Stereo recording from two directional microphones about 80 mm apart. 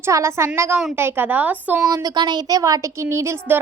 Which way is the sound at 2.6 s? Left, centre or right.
Right.